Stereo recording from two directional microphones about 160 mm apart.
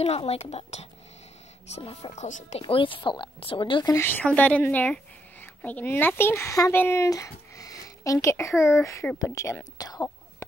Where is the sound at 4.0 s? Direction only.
10° left (ahead or behind).